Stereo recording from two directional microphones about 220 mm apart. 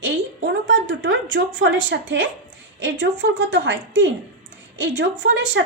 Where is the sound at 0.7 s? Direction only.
55° right (ahead or behind).